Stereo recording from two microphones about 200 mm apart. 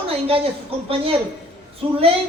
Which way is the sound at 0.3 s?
30° right (ahead or behind).